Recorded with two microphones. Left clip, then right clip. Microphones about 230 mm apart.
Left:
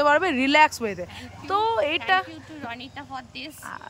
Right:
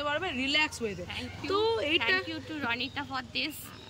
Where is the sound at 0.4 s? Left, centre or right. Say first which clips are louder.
Left 10 dB; centre.